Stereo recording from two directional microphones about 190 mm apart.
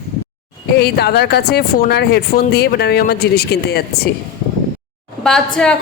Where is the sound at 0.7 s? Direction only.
55° left (ahead or behind).